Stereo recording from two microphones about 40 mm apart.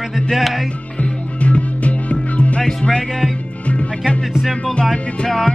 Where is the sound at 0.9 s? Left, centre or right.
Left.